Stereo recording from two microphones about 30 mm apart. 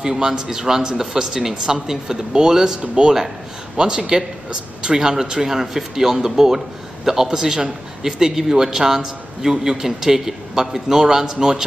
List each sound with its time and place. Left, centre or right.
0.0 s a man's voice: right